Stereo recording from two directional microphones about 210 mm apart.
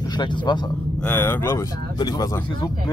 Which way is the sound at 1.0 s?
10° left (ahead or behind).